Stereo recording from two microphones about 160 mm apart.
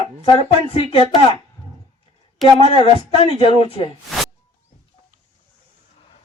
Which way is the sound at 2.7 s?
35° left (ahead or behind).